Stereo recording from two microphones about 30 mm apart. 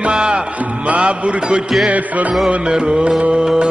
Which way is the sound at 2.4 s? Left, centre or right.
Right.